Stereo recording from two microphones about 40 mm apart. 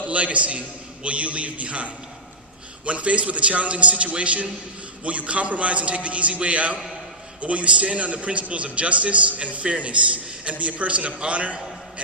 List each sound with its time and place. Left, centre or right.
0.0 s a man's voice: right